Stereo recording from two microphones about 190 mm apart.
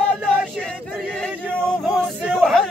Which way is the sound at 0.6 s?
Centre (ahead or behind).